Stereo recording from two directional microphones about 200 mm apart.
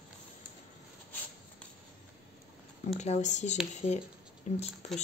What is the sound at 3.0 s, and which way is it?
Speech, 35° left (ahead or behind).